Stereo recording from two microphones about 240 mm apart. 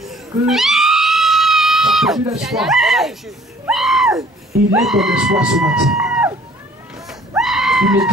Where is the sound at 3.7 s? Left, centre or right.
Centre.